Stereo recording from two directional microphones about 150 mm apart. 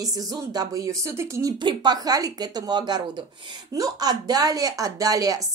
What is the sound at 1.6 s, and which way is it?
A woman's voice, 30° right (ahead or behind).